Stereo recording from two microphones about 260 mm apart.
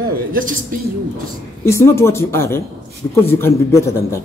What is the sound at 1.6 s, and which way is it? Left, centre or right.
A man's voice, centre.